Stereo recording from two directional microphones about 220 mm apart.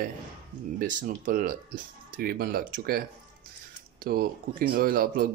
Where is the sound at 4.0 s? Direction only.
40° right (ahead or behind).